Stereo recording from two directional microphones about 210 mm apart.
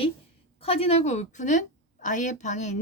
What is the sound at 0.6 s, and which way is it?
A woman's voice, 30° left (ahead or behind).